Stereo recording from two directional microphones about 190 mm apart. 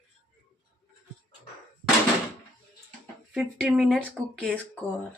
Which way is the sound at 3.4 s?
Centre (ahead or behind).